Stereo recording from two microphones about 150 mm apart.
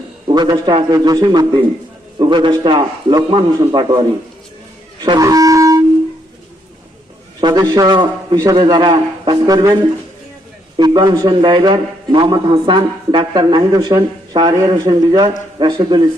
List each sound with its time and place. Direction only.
0.3 s a man's voice: 30° right (ahead or behind)
5.0 s shofar: 25° right (ahead or behind)
7.4 s a man's voice: 30° right (ahead or behind)
10.8 s a man's voice: 30° right (ahead or behind)